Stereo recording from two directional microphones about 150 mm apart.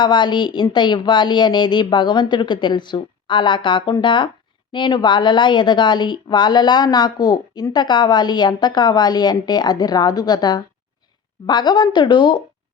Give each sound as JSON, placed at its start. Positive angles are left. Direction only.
{"t": 0.0, "sound": "a woman's voice", "side_deg": 30}